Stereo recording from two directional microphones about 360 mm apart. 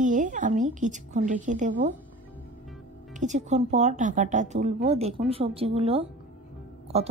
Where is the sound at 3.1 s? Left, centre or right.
Centre.